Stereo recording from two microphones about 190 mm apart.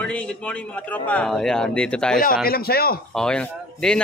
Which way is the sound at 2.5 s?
55° left (ahead or behind).